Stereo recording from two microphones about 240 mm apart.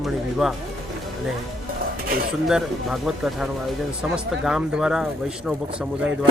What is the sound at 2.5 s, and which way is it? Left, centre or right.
Speech, centre.